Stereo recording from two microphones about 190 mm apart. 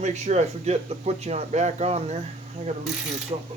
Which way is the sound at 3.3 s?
30° right (ahead or behind).